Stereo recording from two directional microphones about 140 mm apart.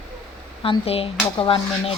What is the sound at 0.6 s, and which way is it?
Speech, 40° left (ahead or behind).